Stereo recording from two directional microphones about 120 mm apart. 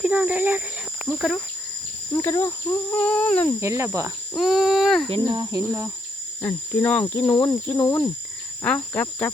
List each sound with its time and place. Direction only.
0.0 s speech: 10° right (ahead or behind)
1.0 s speech: centre (ahead or behind)
2.1 s speech: 25° left (ahead or behind)
3.6 s cricket: 25° right (ahead or behind)
4.4 s speech: centre (ahead or behind)
5.1 s speech: 40° right (ahead or behind)
6.4 s speech: 10° left (ahead or behind)